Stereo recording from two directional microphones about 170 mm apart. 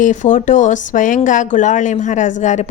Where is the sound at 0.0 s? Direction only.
50° left (ahead or behind).